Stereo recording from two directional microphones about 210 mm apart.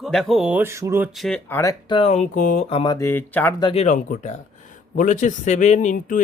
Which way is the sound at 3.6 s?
25° left (ahead or behind).